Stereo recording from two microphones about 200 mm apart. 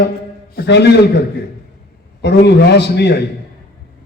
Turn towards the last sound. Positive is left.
turn(degrees=55)  # may be behind; listen again after turning